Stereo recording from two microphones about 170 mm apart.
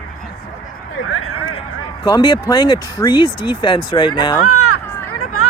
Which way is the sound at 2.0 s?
25° left (ahead or behind).